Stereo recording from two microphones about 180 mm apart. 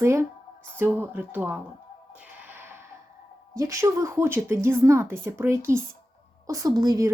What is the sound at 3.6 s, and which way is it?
A woman's voice, 15° right (ahead or behind).